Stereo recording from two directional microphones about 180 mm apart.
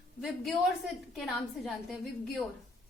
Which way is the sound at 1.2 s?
Centre (ahead or behind).